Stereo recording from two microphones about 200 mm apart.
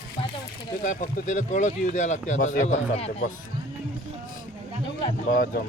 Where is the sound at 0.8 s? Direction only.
40° left (ahead or behind).